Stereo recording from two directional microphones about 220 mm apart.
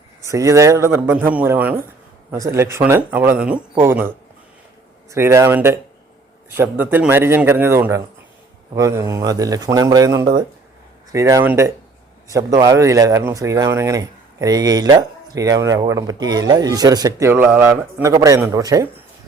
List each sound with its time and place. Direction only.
0.2 s speech: 15° right (ahead or behind)
5.1 s speech: 15° right (ahead or behind)